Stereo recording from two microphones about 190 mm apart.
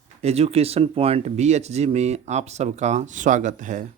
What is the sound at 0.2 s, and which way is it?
Speech, 35° right (ahead or behind).